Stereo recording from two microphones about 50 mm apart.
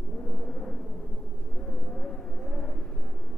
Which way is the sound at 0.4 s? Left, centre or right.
Centre.